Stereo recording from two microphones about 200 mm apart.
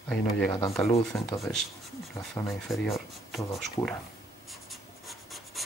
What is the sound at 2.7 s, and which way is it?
Speech, centre (ahead or behind).